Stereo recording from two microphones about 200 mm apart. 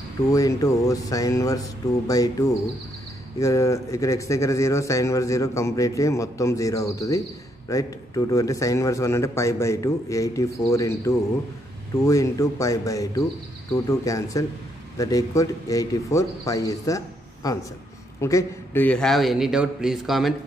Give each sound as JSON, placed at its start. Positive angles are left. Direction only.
{"t": 0.3, "sound": "a man's voice", "side_deg": 15}